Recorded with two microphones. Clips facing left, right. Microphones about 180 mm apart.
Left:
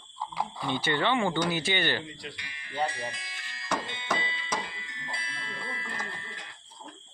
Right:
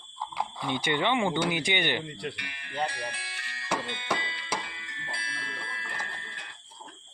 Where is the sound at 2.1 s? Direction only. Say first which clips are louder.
Right 6 dB; 60° right (ahead or behind).